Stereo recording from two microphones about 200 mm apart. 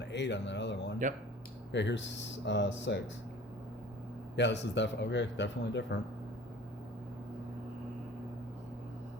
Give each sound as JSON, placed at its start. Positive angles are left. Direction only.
{"t": 0.0, "sound": "a man's voice", "side_deg": 60}
{"t": 4.4, "sound": "a man's voice", "side_deg": 60}